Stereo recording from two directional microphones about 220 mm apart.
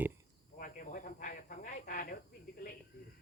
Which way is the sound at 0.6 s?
40° left (ahead or behind).